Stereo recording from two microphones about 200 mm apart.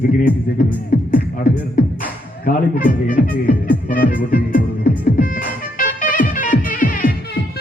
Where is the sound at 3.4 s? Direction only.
45° left (ahead or behind).